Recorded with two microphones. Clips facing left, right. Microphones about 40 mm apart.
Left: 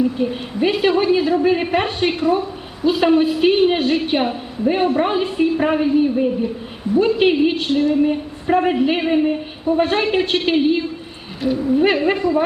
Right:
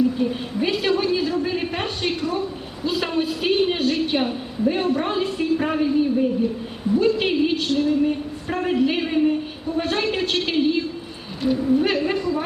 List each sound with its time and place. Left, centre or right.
0.2 s a woman's voice: left
11.4 s speech: centre
11.8 s a woman's voice: left